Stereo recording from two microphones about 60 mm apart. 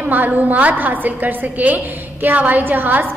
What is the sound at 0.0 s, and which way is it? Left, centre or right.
A woman's voice, right.